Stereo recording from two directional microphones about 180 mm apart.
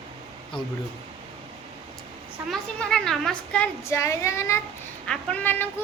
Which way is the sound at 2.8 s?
5° left (ahead or behind).